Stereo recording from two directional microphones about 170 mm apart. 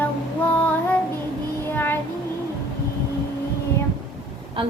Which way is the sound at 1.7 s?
10° left (ahead or behind).